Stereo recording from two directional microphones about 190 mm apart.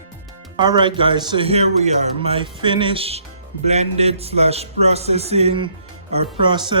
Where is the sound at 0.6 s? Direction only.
25° right (ahead or behind).